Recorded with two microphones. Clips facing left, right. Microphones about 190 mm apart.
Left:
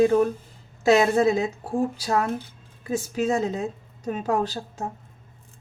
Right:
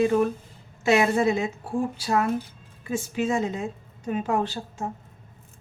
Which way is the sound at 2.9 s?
40° left (ahead or behind).